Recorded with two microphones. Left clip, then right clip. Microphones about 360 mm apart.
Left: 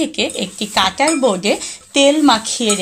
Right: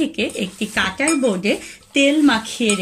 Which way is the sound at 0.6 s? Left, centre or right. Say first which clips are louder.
Left 6 dB; centre.